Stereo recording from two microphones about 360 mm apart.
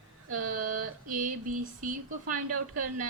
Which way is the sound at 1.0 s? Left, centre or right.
Right.